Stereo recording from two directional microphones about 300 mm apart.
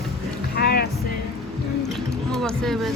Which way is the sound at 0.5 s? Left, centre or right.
Left.